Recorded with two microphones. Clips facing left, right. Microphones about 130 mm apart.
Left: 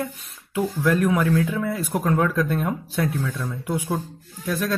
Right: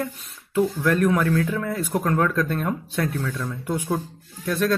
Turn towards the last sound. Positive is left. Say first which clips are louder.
# right 3 dB
turn(degrees=0)  # may be behind; listen again after turning